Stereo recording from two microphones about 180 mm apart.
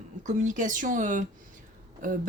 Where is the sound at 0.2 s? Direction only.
45° right (ahead or behind).